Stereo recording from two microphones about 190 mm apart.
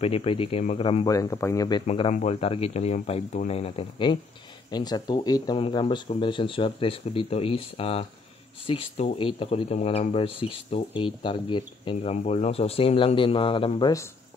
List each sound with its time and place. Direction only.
0.0 s speech: 30° left (ahead or behind)
1.9 s speech: 30° left (ahead or behind)